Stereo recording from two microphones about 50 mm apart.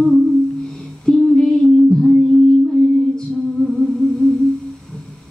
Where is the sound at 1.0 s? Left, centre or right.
Centre.